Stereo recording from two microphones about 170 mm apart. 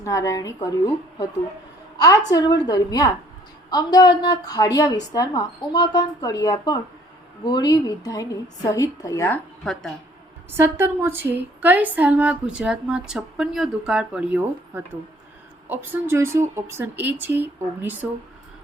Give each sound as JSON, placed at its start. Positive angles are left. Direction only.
{"t": 0.0, "sound": "a woman's voice", "side_deg": 20}
{"t": 2.0, "sound": "a woman's voice", "side_deg": 20}
{"t": 10.6, "sound": "a woman's voice", "side_deg": -15}